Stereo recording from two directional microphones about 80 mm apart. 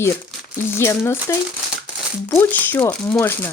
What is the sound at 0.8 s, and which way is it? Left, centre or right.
Speech, left.